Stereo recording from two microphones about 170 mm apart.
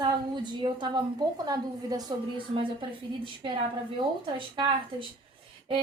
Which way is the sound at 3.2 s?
30° right (ahead or behind).